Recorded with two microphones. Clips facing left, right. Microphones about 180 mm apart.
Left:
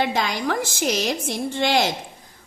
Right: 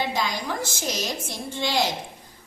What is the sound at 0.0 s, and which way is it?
A woman's voice, 70° left (ahead or behind).